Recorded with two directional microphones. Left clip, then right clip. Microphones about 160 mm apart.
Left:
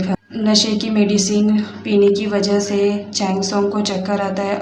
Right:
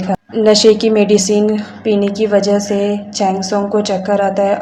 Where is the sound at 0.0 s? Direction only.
35° right (ahead or behind).